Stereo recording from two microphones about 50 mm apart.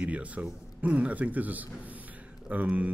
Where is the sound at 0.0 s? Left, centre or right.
Right.